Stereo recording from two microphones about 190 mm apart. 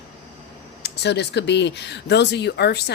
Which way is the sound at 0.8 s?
60° left (ahead or behind).